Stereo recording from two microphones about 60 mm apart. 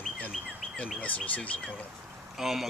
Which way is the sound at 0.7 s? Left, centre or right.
Left.